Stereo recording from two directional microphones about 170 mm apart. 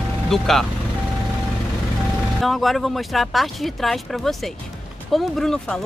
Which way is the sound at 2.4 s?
Centre (ahead or behind).